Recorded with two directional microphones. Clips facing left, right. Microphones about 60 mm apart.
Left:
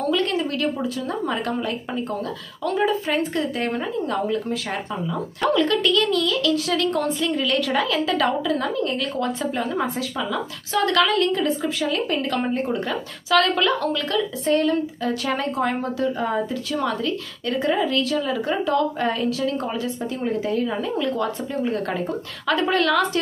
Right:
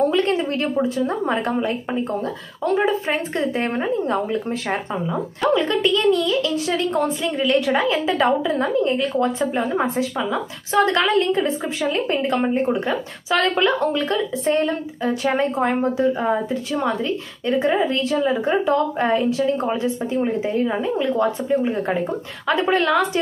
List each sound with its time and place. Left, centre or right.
0.0 s a woman's voice: right